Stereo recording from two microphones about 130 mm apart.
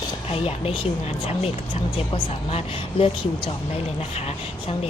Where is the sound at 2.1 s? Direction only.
50° left (ahead or behind).